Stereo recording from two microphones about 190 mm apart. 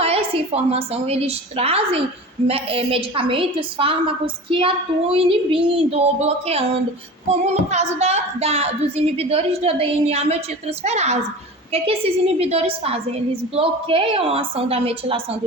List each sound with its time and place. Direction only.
0.0 s a woman's voice: 30° right (ahead or behind)